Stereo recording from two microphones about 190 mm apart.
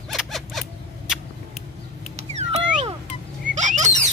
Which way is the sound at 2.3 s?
35° right (ahead or behind).